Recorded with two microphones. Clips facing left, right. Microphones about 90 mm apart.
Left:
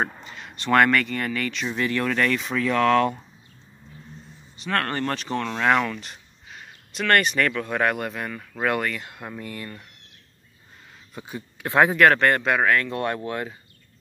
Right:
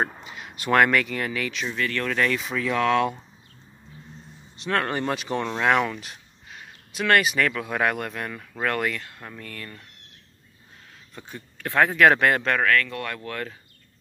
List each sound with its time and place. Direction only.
0.0 s speech: 5° right (ahead or behind)
1.7 s speech: 15° left (ahead or behind)
2.0 s speech: centre (ahead or behind)
4.6 s speech: 5° right (ahead or behind)
9.0 s speech: 15° left (ahead or behind)
11.1 s speech: 5° left (ahead or behind)
12.1 s speech: 5° right (ahead or behind)
12.4 s speech: 15° left (ahead or behind)